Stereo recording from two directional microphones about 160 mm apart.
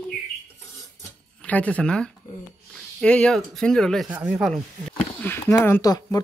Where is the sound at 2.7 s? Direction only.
5° left (ahead or behind).